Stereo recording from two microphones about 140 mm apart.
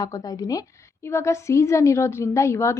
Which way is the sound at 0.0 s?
25° left (ahead or behind).